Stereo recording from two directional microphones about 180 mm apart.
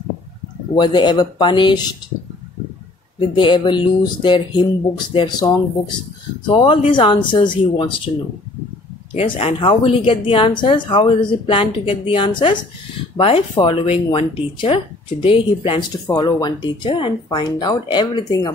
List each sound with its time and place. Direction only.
0.7 s speech: 25° left (ahead or behind)
3.2 s speech: 25° left (ahead or behind)
9.1 s speech: 30° left (ahead or behind)